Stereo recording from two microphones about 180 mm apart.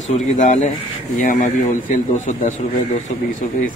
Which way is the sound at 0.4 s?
45° left (ahead or behind).